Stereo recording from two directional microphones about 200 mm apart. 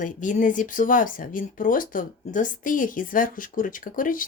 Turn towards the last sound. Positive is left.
turn(degrees=45)  # may be behind; listen again after turning